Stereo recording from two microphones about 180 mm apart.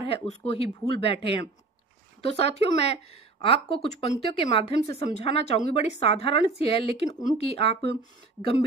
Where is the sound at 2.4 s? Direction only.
35° left (ahead or behind).